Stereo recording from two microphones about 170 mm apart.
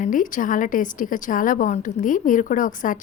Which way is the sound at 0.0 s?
50° left (ahead or behind).